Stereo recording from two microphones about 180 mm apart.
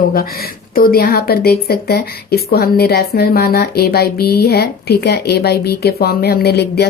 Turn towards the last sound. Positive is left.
turn(degrees=65)  # may be behind; listen again after turning